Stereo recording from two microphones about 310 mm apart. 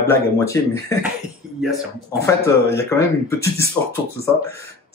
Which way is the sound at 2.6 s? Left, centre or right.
Centre.